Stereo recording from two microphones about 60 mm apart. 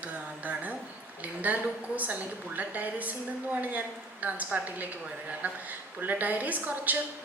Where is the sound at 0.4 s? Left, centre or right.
Right.